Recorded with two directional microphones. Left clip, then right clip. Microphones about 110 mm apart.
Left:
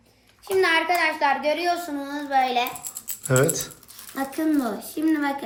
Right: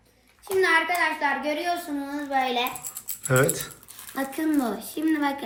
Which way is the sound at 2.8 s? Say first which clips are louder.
Left 1 dB; 30° left (ahead or behind).